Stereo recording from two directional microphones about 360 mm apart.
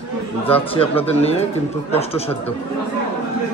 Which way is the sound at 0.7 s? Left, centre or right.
Centre.